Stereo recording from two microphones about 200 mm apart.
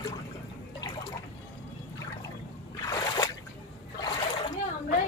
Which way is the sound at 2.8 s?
20° left (ahead or behind).